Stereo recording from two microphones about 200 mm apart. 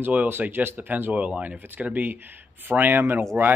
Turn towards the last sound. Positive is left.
turn(degrees=-10)  # may be behind; listen again after turning